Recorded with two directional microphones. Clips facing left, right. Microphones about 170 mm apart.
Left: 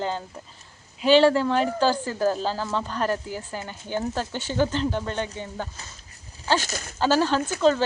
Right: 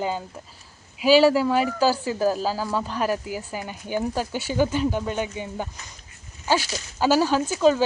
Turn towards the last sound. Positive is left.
turn(degrees=-10)  # may be behind; listen again after turning